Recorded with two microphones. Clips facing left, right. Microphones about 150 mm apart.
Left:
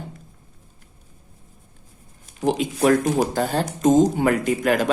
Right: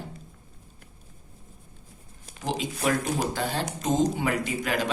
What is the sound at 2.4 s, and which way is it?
Speech, 55° left (ahead or behind).